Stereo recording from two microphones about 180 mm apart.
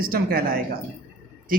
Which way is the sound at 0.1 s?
50° right (ahead or behind).